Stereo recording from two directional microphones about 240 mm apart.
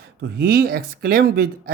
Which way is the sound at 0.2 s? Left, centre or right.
Right.